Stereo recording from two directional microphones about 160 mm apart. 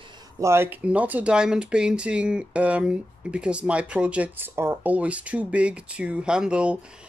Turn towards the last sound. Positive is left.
turn(degrees=-5)  # may be behind; listen again after turning